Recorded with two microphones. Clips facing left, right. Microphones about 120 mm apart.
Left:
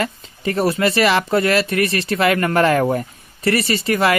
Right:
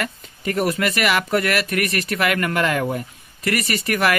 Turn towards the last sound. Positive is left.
turn(degrees=20)  # may be behind; listen again after turning